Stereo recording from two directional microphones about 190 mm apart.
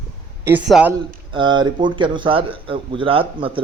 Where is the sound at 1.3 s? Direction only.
25° right (ahead or behind).